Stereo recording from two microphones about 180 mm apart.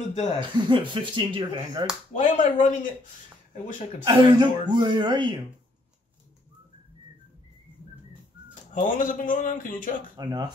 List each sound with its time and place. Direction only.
0.1 s speech: 40° left (ahead or behind)
0.7 s speech: 25° right (ahead or behind)
2.1 s speech: 40° left (ahead or behind)
4.0 s speech: 25° right (ahead or behind)
8.7 s speech: 45° left (ahead or behind)
10.1 s speech: 25° right (ahead or behind)